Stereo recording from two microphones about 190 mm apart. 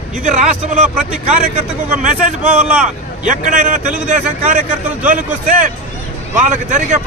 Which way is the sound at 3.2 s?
40° right (ahead or behind).